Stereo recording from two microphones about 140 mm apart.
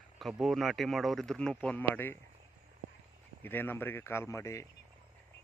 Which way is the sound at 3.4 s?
15° left (ahead or behind).